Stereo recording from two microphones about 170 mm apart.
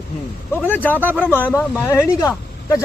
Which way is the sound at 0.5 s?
10° left (ahead or behind).